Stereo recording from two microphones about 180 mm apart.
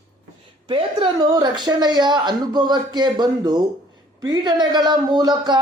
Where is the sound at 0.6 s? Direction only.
25° right (ahead or behind).